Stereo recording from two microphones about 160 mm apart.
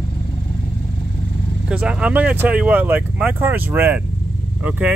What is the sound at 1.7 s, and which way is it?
Speech, 5° right (ahead or behind).